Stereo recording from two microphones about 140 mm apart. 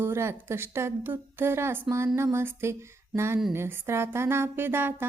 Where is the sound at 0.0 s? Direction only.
20° right (ahead or behind).